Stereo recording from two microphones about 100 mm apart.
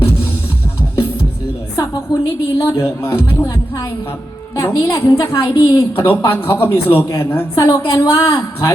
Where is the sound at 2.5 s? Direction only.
30° left (ahead or behind).